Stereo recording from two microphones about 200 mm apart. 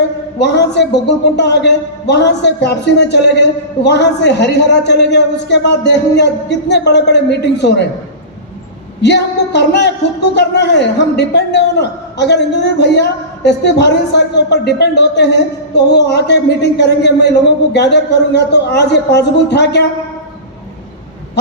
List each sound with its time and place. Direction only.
0.3 s a man's voice: 60° left (ahead or behind)
9.0 s a man's voice: 60° left (ahead or behind)